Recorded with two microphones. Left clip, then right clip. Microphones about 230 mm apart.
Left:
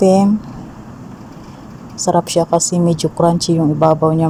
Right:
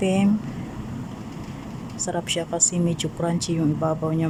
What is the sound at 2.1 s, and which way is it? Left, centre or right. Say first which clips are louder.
A woman's voice: left 13 dB; centre.